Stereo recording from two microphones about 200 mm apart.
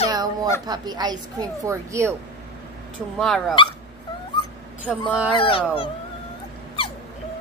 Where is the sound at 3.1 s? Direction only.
Centre (ahead or behind).